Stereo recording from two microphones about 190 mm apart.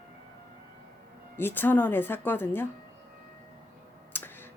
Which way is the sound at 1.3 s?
10° left (ahead or behind).